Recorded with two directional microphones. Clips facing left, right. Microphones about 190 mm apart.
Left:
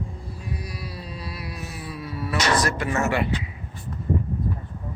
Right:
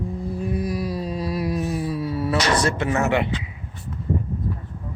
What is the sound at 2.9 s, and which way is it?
Speech, 20° right (ahead or behind).